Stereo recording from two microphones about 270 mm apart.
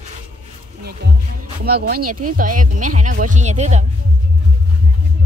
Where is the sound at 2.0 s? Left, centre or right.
Right.